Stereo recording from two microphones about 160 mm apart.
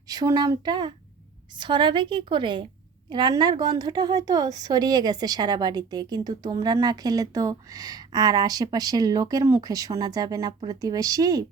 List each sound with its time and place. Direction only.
0.1 s a woman's voice: 20° right (ahead or behind)